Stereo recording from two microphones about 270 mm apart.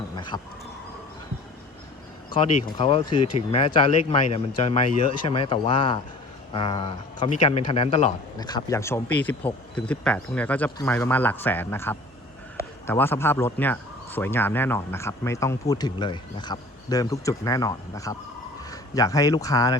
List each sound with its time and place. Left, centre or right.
0.3 s speech: centre
2.7 s speech: centre